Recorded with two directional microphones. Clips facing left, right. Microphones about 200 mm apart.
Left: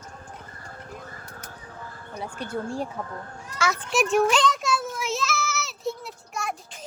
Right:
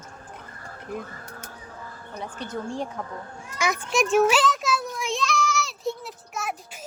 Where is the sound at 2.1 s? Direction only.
10° left (ahead or behind).